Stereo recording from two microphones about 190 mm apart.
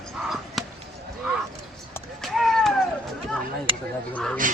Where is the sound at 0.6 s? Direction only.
Centre (ahead or behind).